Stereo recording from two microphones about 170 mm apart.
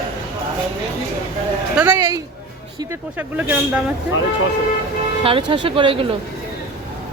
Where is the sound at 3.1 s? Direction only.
10° right (ahead or behind).